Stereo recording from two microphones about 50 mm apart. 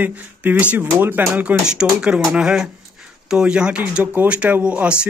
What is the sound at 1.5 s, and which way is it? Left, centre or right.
Speech, centre.